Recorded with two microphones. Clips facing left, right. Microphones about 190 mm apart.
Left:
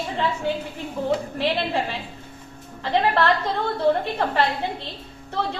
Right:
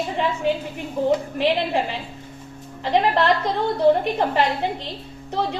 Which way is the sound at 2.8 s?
15° right (ahead or behind).